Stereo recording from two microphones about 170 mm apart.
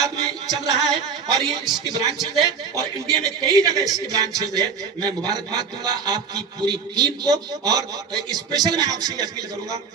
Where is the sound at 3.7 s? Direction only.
20° right (ahead or behind).